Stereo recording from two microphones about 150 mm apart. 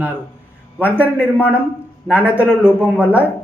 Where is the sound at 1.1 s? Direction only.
10° right (ahead or behind).